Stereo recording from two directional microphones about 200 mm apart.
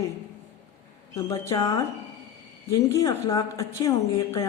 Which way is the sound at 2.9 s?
15° left (ahead or behind).